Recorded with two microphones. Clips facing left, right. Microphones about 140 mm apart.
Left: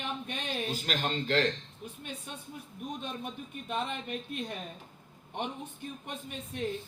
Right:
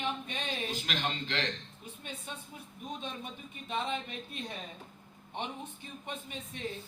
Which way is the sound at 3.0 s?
50° left (ahead or behind).